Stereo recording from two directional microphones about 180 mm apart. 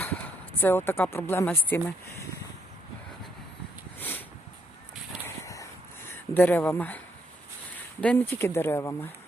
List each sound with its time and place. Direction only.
0.0 s speech: 10° left (ahead or behind)
5.2 s a sound: 15° left (ahead or behind)
6.1 s speech: 10° left (ahead or behind)
8.0 s speech: 10° left (ahead or behind)